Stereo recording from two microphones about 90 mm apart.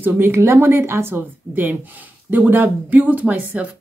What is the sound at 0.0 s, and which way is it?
Speech, 25° right (ahead or behind).